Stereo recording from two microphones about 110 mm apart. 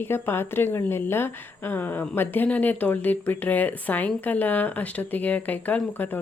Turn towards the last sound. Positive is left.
turn(degrees=15)  # may be behind; listen again after turning